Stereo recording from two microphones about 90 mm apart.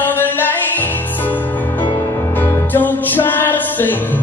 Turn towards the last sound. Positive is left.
turn(degrees=20)  # may be behind; listen again after turning